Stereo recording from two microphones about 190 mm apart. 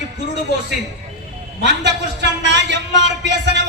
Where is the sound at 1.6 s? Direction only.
65° right (ahead or behind).